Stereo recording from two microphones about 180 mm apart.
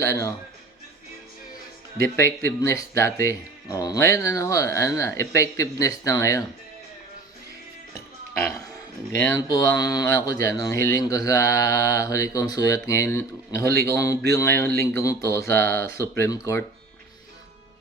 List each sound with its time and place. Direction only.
0.0 s speech: 15° left (ahead or behind)
2.6 s speech: 15° left (ahead or behind)
7.9 s music: 15° left (ahead or behind)
9.2 s speech: 15° left (ahead or behind)